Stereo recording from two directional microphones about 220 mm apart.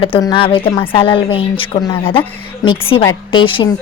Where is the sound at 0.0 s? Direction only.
20° left (ahead or behind).